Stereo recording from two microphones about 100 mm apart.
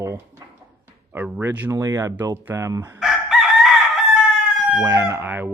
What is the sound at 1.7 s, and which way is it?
Speech, 35° right (ahead or behind).